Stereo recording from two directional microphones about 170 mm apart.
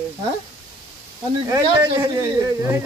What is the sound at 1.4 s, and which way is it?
Speech, 20° right (ahead or behind).